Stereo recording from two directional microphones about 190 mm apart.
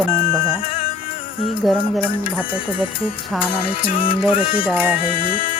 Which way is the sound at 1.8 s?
25° left (ahead or behind).